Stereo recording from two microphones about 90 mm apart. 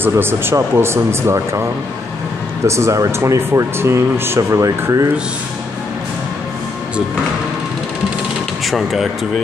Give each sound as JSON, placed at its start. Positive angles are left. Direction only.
{"t": 0.0, "sound": "speech", "side_deg": -25}
{"t": 8.6, "sound": "speech", "side_deg": 0}